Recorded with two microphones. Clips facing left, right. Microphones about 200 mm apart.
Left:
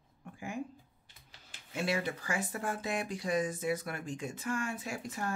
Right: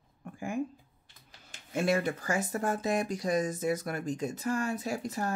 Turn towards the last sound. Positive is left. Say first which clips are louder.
# right 6 dB
turn(degrees=-40)  # may be behind; listen again after turning